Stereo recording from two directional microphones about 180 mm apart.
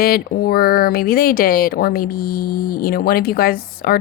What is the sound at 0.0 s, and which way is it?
Speech, 55° left (ahead or behind).